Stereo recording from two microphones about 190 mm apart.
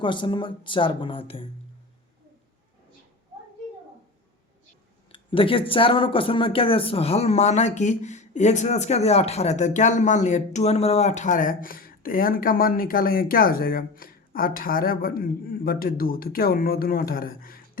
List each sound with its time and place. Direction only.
0.0 s speech: 25° left (ahead or behind)
5.1 s speech: 25° left (ahead or behind); by 17.6 s 50° left (ahead or behind)